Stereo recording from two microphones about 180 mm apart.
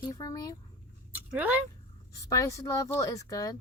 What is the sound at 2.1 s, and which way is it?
Speech, 20° left (ahead or behind).